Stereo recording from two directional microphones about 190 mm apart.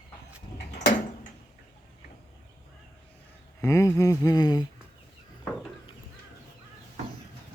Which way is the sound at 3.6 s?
15° left (ahead or behind).